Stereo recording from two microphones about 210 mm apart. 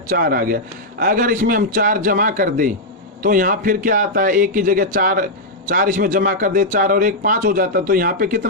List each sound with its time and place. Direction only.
0.1 s a man's voice: 45° right (ahead or behind)